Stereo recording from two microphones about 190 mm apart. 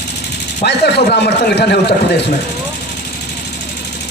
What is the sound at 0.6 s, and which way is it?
A man's voice, 55° left (ahead or behind).